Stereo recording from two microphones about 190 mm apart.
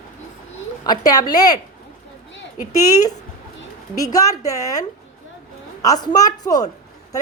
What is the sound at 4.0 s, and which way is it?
Speech, 20° left (ahead or behind).